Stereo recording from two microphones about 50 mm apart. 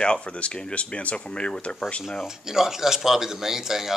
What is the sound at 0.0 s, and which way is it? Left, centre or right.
Speech, left.